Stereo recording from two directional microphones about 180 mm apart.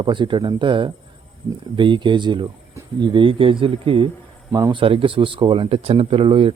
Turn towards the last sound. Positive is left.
turn(degrees=-30)  # may be behind; listen again after turning